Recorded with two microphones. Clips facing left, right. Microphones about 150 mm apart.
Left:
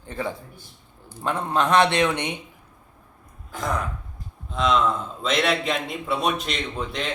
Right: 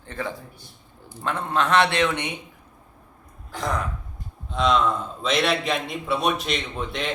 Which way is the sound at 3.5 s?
Centre (ahead or behind).